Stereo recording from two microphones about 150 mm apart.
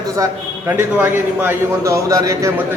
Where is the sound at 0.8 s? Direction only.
15° right (ahead or behind).